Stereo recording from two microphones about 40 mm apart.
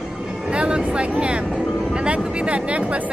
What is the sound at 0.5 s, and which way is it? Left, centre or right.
Speech, right.